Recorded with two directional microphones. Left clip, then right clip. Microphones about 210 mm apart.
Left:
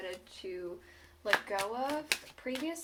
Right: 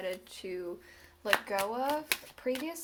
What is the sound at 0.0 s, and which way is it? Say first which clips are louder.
Speech: right 4 dB; 50° right (ahead or behind).